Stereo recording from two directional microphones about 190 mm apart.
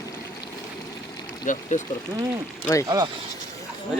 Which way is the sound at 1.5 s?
40° left (ahead or behind).